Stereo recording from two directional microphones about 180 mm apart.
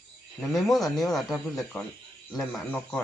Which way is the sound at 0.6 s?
Centre (ahead or behind).